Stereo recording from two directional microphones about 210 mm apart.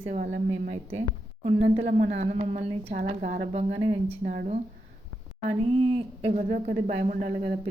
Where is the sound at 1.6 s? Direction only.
30° right (ahead or behind).